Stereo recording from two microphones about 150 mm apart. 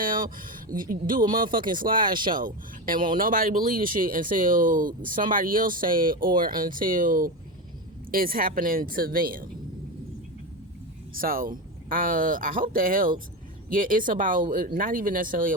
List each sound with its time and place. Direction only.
0.0 s speech: 65° right (ahead or behind)
2.0 s speech: 30° right (ahead or behind)
2.3 s speech: 70° right (ahead or behind)
11.1 s speech: 70° right (ahead or behind)